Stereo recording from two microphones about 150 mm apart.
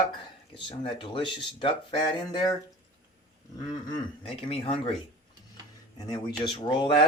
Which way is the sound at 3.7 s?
35° left (ahead or behind).